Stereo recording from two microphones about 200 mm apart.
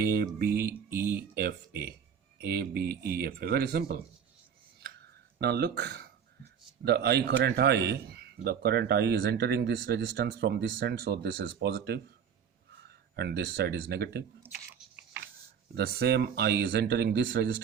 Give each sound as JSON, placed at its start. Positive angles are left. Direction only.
{"t": 0.0, "sound": "speech", "side_deg": -50}
{"t": 0.7, "sound": "speech", "side_deg": -10}
{"t": 1.1, "sound": "speech", "side_deg": -50}
{"t": 5.4, "sound": "a man's voice", "side_deg": -55}
{"t": 15.7, "sound": "speech", "side_deg": -55}